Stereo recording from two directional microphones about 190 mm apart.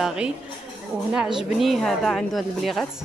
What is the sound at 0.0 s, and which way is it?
A woman's voice, 5° right (ahead or behind).